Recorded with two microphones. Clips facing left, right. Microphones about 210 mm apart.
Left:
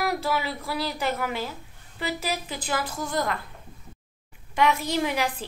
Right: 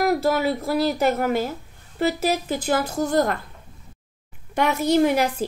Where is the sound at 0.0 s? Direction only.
45° right (ahead or behind).